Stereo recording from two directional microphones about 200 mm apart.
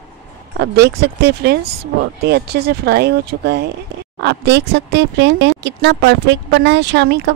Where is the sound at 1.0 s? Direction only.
55° right (ahead or behind).